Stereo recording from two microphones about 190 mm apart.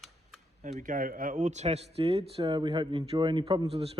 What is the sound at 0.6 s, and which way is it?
Speech, 45° right (ahead or behind).